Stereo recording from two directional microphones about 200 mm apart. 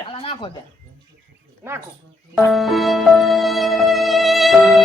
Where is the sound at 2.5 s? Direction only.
Centre (ahead or behind).